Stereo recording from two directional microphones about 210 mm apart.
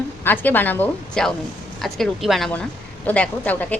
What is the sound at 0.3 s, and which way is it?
A woman's voice, 10° left (ahead or behind).